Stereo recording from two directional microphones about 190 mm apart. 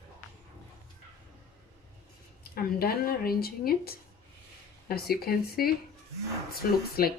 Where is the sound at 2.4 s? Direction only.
50° left (ahead or behind).